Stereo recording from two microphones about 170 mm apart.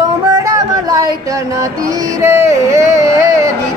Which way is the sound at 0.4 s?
20° right (ahead or behind).